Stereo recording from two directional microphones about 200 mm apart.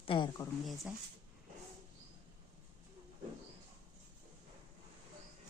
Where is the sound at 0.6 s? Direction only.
Centre (ahead or behind).